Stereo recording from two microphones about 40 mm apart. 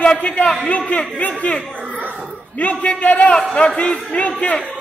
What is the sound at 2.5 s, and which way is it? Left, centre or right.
Speech, left.